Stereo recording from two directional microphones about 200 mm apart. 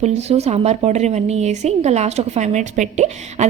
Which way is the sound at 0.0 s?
35° right (ahead or behind).